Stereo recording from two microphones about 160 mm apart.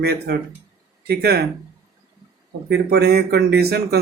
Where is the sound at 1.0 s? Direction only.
80° right.